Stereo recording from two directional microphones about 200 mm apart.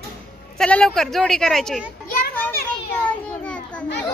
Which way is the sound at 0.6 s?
5° left (ahead or behind).